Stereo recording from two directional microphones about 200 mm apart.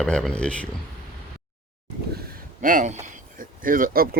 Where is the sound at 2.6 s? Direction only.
40° right (ahead or behind).